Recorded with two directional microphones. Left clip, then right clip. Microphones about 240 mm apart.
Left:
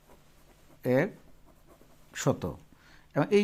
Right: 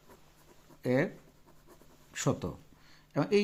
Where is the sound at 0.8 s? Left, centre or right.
Centre.